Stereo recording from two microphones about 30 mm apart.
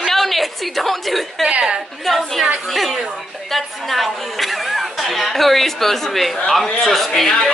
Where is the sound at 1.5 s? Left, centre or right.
Right.